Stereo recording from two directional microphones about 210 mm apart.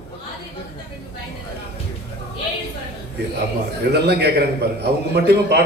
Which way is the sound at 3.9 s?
50° right (ahead or behind).